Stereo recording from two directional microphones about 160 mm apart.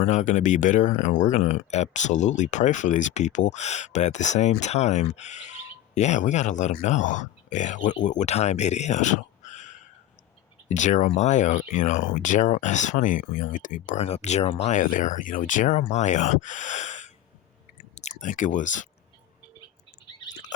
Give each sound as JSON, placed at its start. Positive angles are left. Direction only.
{"t": 0.0, "sound": "speech", "side_deg": 50}